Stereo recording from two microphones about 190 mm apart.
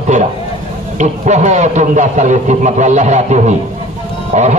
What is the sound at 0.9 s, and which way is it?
A man's voice, 40° right (ahead or behind).